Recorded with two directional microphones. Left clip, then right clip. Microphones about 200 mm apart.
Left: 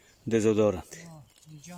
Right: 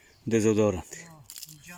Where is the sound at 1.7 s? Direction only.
35° left (ahead or behind).